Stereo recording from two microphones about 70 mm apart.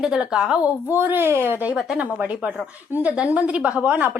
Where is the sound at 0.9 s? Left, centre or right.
Right.